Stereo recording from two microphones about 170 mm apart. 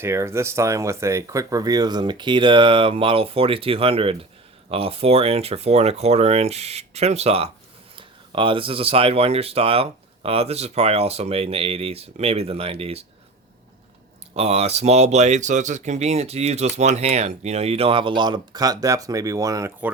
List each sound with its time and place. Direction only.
0.0 s speech: 15° right (ahead or behind); by 13.1 s 35° right (ahead or behind)
14.3 s speech: 35° right (ahead or behind); by 19.9 s 15° right (ahead or behind)